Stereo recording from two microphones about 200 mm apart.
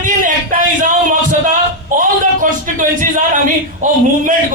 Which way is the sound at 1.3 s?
40° right (ahead or behind).